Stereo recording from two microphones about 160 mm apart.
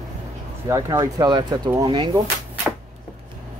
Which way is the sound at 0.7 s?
20° right (ahead or behind).